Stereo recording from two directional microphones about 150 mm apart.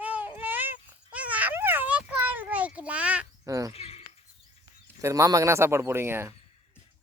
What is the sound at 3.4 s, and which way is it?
Speech, 20° right (ahead or behind).